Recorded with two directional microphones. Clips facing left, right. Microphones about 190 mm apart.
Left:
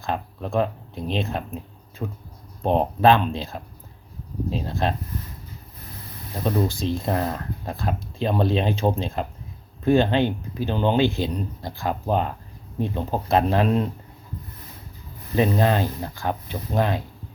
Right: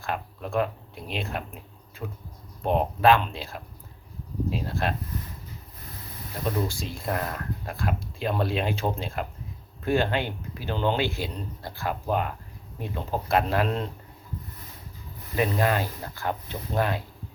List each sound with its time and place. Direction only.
0.0 s speech: 20° left (ahead or behind)
6.4 s speech: 20° left (ahead or behind)
15.4 s speech: 25° left (ahead or behind)